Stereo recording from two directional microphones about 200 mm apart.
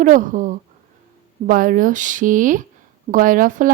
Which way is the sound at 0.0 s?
40° right (ahead or behind).